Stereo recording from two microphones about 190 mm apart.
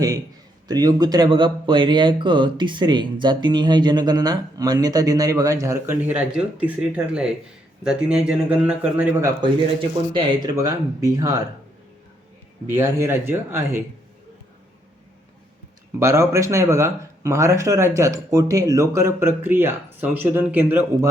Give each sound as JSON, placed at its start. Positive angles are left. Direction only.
{"t": 0.7, "sound": "a man's voice", "side_deg": -20}
{"t": 10.2, "sound": "speech", "side_deg": -20}
{"t": 12.6, "sound": "speech", "side_deg": -10}
{"t": 16.0, "sound": "speech", "side_deg": -15}